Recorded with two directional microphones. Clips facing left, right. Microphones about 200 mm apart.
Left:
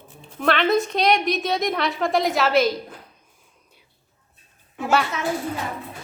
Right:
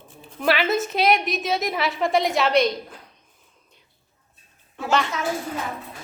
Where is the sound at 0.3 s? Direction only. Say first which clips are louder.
Left 2 dB; 5° right (ahead or behind).